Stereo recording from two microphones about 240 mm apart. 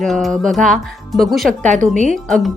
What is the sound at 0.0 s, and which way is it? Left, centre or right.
A woman's voice, centre.